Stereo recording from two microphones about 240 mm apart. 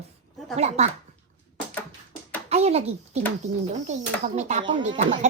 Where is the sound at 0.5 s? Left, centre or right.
Right.